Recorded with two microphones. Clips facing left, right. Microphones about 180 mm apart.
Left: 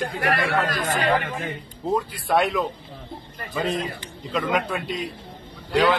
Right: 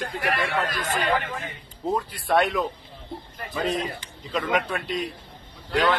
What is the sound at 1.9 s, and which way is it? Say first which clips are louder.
A man's voice: left 2 dB; centre (ahead or behind).